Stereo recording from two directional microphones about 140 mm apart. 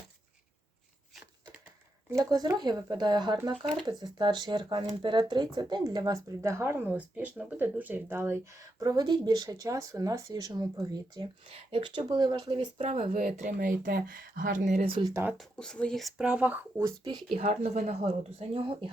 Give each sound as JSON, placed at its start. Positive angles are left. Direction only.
{"t": 2.0, "sound": "speech", "side_deg": -25}
{"t": 8.8, "sound": "speech", "side_deg": -25}
{"t": 11.5, "sound": "speech", "side_deg": -40}
{"t": 13.1, "sound": "speech", "side_deg": -60}
{"t": 14.8, "sound": "speech", "side_deg": -35}
{"t": 15.1, "sound": "speech", "side_deg": -15}
{"t": 15.5, "sound": "speech", "side_deg": 5}
{"t": 17.3, "sound": "speech", "side_deg": -50}